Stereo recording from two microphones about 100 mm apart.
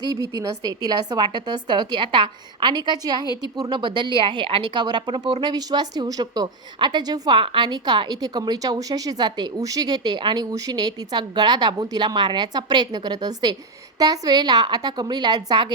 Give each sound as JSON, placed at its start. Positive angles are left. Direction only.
{"t": 0.0, "sound": "a woman's voice", "side_deg": -40}